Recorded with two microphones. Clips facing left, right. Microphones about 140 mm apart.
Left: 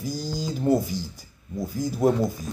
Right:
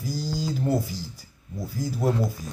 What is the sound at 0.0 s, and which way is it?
Typing, 20° left (ahead or behind).